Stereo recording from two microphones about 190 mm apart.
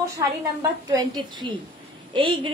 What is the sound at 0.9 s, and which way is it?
A woman's voice, 20° right (ahead or behind).